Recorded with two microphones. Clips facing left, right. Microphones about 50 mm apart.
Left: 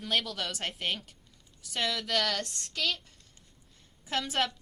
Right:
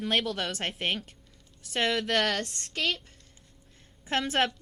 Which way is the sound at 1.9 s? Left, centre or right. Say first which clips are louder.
Right 5 dB; right.